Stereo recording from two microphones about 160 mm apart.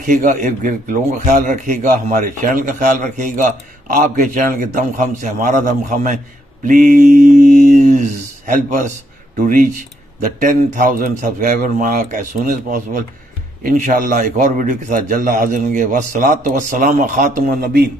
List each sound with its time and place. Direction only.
0.0 s a man's voice: 55° right (ahead or behind)